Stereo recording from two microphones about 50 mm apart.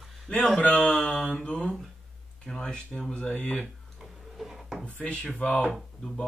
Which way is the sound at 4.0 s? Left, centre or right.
Centre.